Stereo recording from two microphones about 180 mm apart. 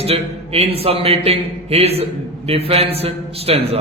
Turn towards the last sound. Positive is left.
turn(degrees=-35)  # may be behind; listen again after turning